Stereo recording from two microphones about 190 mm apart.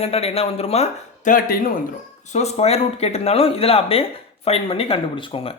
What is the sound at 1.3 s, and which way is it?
Speech, 50° left (ahead or behind).